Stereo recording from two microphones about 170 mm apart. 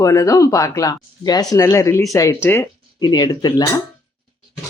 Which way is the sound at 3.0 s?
25° left (ahead or behind).